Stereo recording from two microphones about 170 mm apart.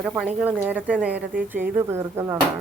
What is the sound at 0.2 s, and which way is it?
Speech, 5° right (ahead or behind).